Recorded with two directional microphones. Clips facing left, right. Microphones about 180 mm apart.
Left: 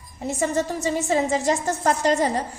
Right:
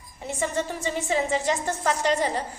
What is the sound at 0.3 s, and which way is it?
A woman's voice, 40° left (ahead or behind).